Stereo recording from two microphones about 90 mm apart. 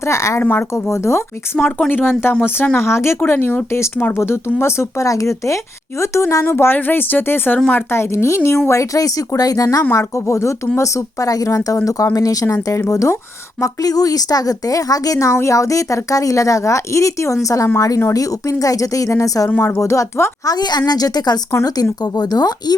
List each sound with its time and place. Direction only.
0.0 s a woman's voice: 35° left (ahead or behind)
1.5 s speech: 10° left (ahead or behind)
1.9 s a woman's voice: 20° left (ahead or behind); by 19.5 s 40° left (ahead or behind)
19.5 s speech: 20° left (ahead or behind)
19.8 s a woman's voice: 35° left (ahead or behind)
20.5 s a woman's voice: 50° left (ahead or behind)